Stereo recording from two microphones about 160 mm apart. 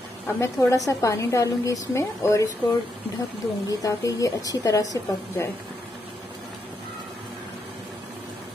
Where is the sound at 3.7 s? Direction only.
20° left (ahead or behind).